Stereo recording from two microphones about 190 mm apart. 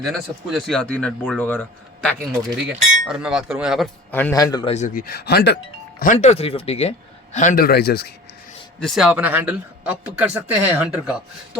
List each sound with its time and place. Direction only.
0.0 s speech: centre (ahead or behind)
2.6 s speech: 5° right (ahead or behind)
4.1 s a man's voice: 10° left (ahead or behind)
4.7 s speech: 35° left (ahead or behind)
5.0 s speech: 55° left (ahead or behind)
6.0 s speech: 40° left (ahead or behind)
7.3 s speech: 45° left (ahead or behind)
8.8 s speech: centre (ahead or behind)